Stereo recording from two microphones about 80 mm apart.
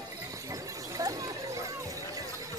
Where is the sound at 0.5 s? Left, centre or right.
Right.